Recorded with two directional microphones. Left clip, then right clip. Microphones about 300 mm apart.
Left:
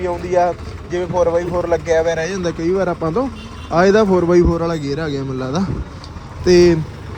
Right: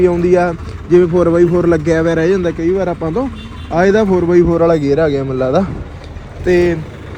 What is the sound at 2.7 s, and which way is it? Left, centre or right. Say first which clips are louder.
Speech: right 1 dB; right.